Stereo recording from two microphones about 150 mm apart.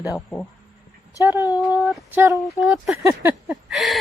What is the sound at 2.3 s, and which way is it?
Speech, 20° left (ahead or behind).